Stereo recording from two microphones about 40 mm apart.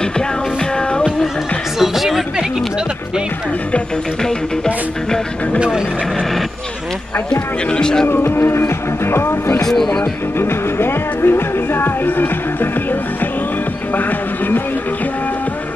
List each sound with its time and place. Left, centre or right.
1.8 s chatter: centre
5.6 s vehicle: centre
7.2 s speech: centre
8.4 s music: left